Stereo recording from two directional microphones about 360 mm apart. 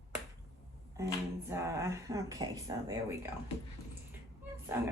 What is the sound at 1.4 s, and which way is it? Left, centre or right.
Speech, centre.